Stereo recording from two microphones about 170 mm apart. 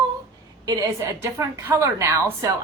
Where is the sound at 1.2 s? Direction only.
15° right (ahead or behind).